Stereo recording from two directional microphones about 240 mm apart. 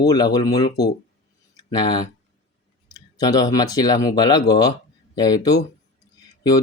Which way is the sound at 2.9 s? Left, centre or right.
Centre.